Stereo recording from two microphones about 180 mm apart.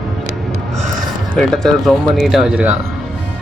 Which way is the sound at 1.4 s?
Centre (ahead or behind).